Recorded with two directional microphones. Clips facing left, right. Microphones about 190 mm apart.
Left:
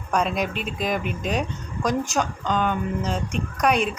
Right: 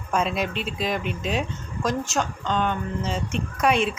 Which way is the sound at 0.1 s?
5° right (ahead or behind).